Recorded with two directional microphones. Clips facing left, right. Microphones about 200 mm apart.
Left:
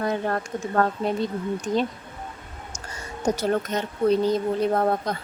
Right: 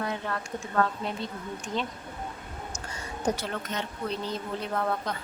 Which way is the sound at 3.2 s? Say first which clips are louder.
Left 7 dB; 40° left (ahead or behind).